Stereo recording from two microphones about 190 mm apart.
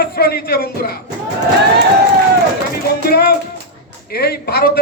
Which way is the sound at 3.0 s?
55° left (ahead or behind).